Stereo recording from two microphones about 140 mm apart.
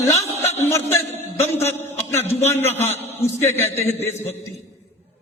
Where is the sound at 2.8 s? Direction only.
50° left (ahead or behind).